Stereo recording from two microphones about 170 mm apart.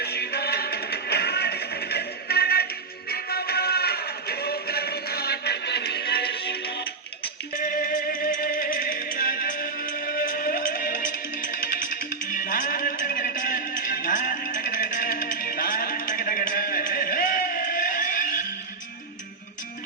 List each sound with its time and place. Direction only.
0.0 s music: 70° left (ahead or behind)
7.6 s music: 55° left (ahead or behind)